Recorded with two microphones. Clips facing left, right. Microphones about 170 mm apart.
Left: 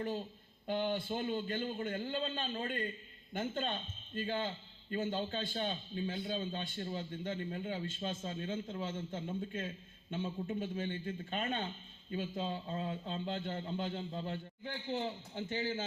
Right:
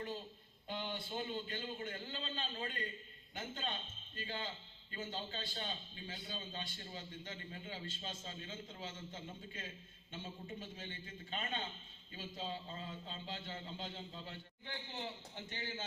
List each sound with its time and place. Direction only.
0.7 s a man's voice: 50° left (ahead or behind)